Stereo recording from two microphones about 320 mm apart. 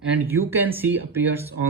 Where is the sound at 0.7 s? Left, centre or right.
Centre.